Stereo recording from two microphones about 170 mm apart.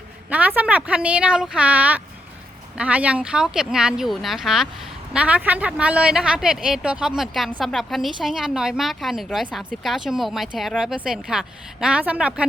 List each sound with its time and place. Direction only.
0.3 s a woman's voice: 10° right (ahead or behind)